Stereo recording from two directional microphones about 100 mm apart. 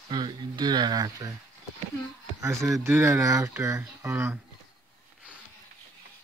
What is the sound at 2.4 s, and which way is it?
Speech, 30° right (ahead or behind).